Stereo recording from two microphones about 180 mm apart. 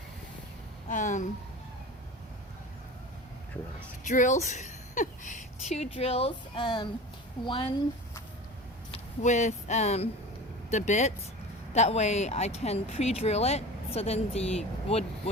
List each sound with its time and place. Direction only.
0.9 s speech: 45° left (ahead or behind)
4.0 s a woman's voice: 45° left (ahead or behind)
8.9 s speech: 40° left (ahead or behind)